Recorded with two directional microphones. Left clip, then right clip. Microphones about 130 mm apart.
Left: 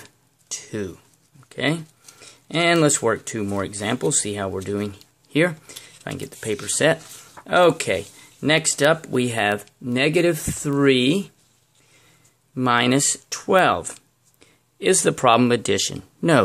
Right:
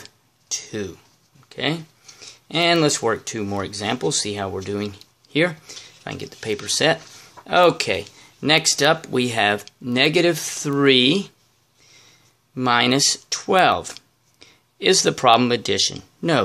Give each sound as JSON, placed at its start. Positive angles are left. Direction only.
{"t": 0.5, "sound": "speech", "side_deg": 25}
{"t": 12.5, "sound": "speech", "side_deg": 20}
{"t": 13.7, "sound": "a sound", "side_deg": 15}
{"t": 15.0, "sound": "speech", "side_deg": 20}